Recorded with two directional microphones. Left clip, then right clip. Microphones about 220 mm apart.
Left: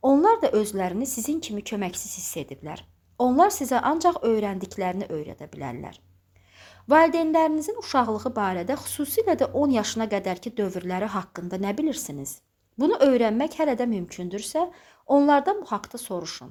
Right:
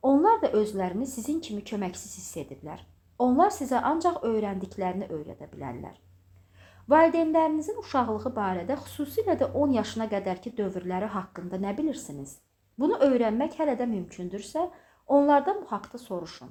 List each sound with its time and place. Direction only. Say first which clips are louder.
0.0 s speech: left 3 dB; 35° left (ahead or behind)